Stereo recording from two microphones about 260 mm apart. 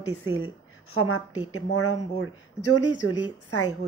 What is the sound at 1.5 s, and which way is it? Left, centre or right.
Speech, left.